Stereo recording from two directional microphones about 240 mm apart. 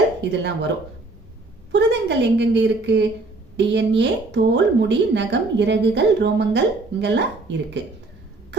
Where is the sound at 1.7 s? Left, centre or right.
Right.